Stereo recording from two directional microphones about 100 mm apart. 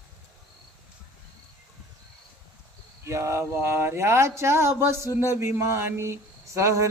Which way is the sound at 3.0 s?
30° right (ahead or behind).